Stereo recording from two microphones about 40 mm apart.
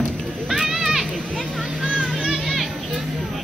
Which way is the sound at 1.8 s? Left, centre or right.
Right.